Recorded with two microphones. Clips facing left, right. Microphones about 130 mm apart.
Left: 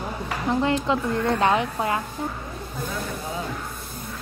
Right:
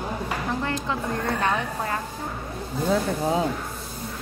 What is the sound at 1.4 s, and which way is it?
Speech, 15° left (ahead or behind).